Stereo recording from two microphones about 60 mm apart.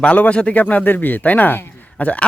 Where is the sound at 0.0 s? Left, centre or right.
Left.